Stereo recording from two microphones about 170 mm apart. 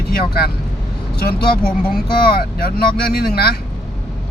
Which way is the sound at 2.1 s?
65° left (ahead or behind).